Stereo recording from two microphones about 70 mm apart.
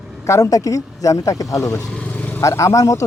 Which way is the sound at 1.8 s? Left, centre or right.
Centre.